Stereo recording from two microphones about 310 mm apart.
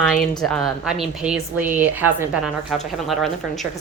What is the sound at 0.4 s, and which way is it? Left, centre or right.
A woman's voice, centre.